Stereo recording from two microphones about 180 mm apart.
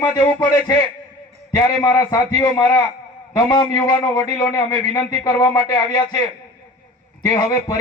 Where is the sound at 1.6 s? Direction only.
20° left (ahead or behind).